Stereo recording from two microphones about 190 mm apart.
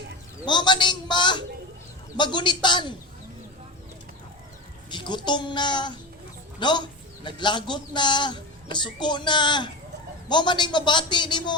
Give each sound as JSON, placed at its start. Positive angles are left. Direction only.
{"t": 0.4, "sound": "speech", "side_deg": 25}
{"t": 4.9, "sound": "speech", "side_deg": 25}